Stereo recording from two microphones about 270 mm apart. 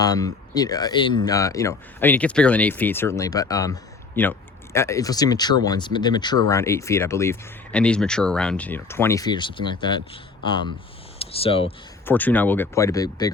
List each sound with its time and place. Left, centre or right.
0.0 s speech: centre
12.0 s speech: centre